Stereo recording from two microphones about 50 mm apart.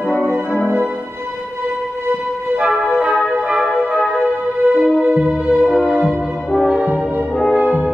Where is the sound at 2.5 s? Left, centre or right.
Centre.